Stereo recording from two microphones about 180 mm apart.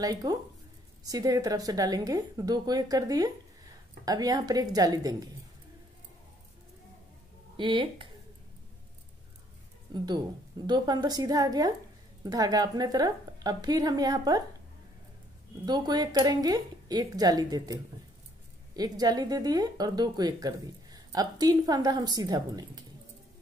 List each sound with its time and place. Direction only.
0.0 s speech: 20° right (ahead or behind)
7.5 s speech: 25° right (ahead or behind)
9.9 s speech: 25° right (ahead or behind)
15.6 s speech: 20° right (ahead or behind)
18.8 s speech: 20° right (ahead or behind)